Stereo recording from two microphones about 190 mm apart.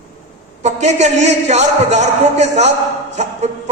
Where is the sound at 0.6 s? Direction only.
35° right (ahead or behind).